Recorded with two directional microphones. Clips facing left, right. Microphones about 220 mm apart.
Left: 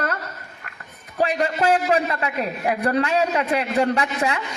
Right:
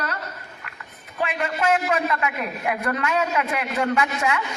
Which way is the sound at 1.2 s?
35° left (ahead or behind).